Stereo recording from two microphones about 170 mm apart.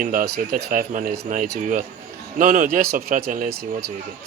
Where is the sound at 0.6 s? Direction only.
50° right (ahead or behind).